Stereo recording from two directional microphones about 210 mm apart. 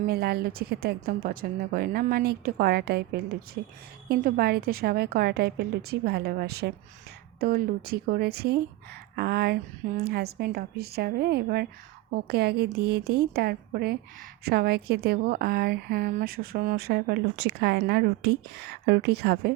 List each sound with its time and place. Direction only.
0.0 s speech: 50° right (ahead or behind)